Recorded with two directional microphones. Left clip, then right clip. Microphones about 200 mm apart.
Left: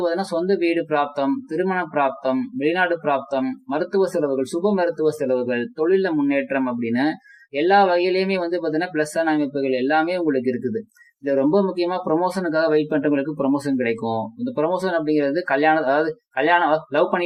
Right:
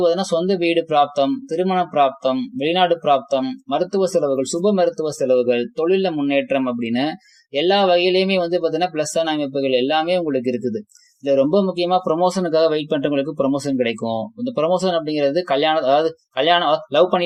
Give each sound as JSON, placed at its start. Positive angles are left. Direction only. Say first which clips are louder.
{"t": 0.0, "sound": "speech", "louder": "right 4 dB", "side_deg": -35}
{"t": 7.5, "sound": "speech", "louder": "right 1 dB", "side_deg": -35}